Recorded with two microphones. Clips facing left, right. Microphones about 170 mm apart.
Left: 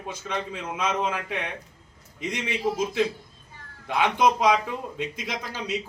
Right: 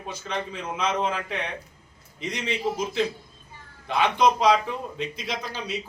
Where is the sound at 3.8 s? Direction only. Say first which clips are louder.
Right 1 dB; 10° left (ahead or behind).